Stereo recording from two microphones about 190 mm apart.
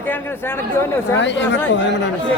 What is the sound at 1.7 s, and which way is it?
Speech, 70° left (ahead or behind).